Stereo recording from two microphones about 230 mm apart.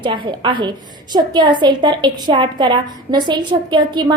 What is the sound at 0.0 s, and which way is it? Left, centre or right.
A woman's voice, centre.